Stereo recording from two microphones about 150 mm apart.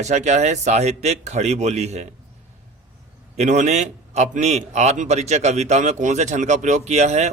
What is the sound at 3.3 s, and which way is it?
A man's voice, 50° right (ahead or behind).